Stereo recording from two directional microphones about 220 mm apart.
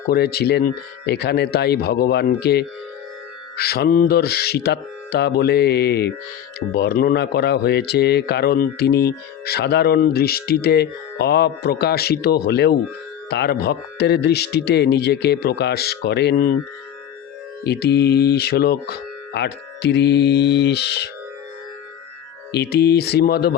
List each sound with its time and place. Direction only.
0.1 s a man's voice: 45° left (ahead or behind)
17.6 s a man's voice: 45° left (ahead or behind)
22.5 s a man's voice: 50° left (ahead or behind)